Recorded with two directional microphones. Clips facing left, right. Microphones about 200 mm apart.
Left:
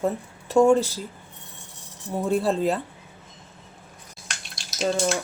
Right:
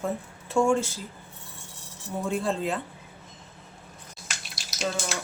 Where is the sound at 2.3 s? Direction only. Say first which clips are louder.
Left 6 dB; 35° left (ahead or behind).